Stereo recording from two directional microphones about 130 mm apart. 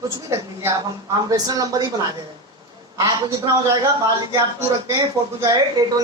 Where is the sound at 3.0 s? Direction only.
25° right (ahead or behind).